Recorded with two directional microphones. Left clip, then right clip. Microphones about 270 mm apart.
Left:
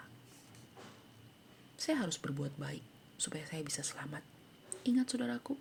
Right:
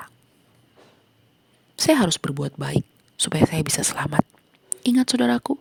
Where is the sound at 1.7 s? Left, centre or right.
Right.